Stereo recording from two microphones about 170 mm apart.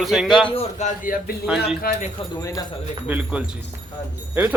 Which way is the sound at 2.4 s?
20° left (ahead or behind).